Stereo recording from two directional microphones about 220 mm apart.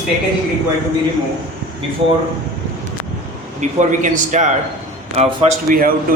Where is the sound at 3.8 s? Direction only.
35° right (ahead or behind).